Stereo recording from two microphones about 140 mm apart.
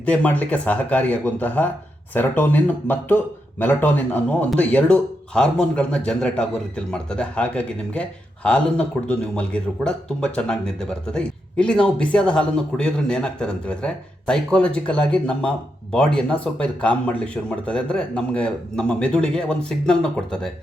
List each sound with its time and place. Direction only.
0.0 s speech: 10° left (ahead or behind)